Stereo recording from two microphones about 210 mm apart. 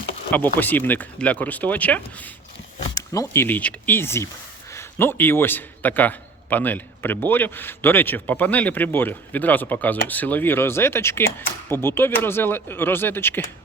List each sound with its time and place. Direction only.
0.3 s a man's voice: 10° left (ahead or behind)